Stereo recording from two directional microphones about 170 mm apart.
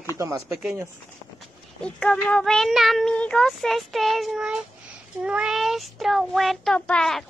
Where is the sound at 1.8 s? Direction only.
5° left (ahead or behind).